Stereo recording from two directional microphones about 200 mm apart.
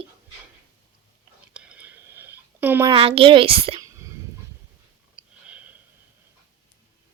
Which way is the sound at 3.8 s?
15° right (ahead or behind).